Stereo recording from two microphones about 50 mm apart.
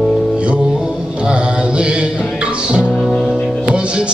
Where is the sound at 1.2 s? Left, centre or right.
Right.